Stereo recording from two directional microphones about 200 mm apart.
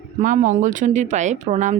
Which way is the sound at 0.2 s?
40° right (ahead or behind).